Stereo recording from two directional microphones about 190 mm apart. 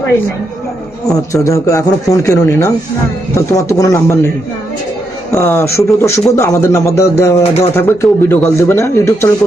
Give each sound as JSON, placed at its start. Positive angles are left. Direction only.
{"t": 1.1, "sound": "speech", "side_deg": 15}
{"t": 5.3, "sound": "speech", "side_deg": 15}